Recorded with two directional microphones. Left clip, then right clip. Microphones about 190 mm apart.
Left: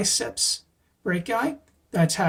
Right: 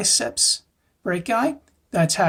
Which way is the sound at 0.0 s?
30° right (ahead or behind).